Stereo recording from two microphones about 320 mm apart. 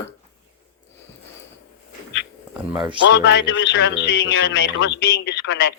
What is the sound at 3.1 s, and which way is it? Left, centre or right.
Speech, left.